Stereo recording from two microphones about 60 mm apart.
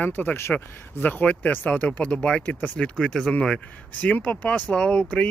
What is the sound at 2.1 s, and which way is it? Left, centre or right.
Speech, centre.